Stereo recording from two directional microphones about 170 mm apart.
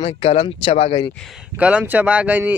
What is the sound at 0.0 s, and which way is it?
Speech, 35° left (ahead or behind).